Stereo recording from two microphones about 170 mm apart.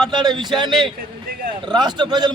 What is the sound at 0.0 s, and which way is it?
A man's voice, 25° right (ahead or behind).